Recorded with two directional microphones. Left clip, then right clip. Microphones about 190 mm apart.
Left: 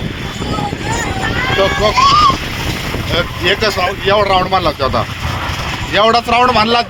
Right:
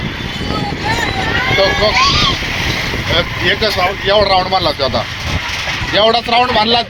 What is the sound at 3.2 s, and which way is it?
Speech, 25° left (ahead or behind).